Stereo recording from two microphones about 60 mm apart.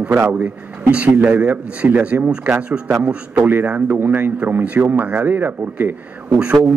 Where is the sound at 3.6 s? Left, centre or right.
Right.